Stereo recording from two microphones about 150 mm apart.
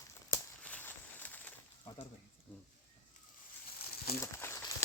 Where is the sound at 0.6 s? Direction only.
10° left (ahead or behind).